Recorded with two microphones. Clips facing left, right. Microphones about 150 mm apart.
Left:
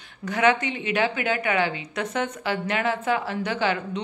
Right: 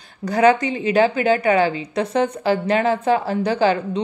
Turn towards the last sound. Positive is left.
turn(degrees=-35)  # may be behind; listen again after turning